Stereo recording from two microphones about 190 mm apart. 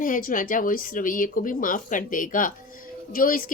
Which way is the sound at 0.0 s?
45° left (ahead or behind).